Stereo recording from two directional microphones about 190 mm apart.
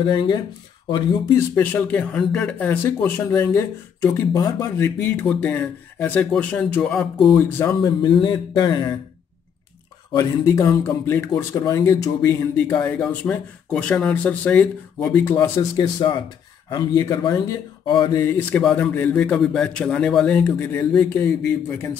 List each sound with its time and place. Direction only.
0.0 s speech: 25° left (ahead or behind)
1.5 s speech: 10° left (ahead or behind)
7.8 s speech: 25° left (ahead or behind)
10.1 s speech: 15° left (ahead or behind)
18.6 s speech: 5° left (ahead or behind)